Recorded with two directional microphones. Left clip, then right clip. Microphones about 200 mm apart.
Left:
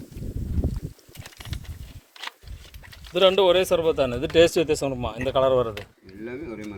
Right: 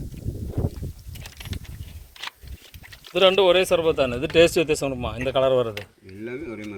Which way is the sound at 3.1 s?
Centre (ahead or behind).